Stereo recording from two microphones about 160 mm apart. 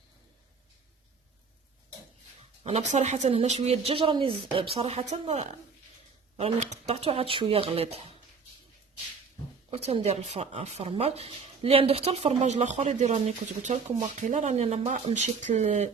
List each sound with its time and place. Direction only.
2.6 s speech: 40° right (ahead or behind)
9.6 s speech: 40° right (ahead or behind)